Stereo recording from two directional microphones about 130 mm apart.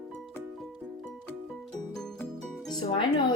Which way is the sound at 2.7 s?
35° left (ahead or behind).